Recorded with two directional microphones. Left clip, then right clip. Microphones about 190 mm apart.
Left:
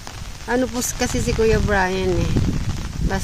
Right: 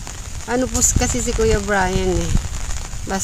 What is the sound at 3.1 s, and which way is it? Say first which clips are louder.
Speech: right 2 dB; 25° right (ahead or behind).